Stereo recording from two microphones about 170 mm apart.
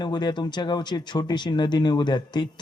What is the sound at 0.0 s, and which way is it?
Speech, 25° left (ahead or behind).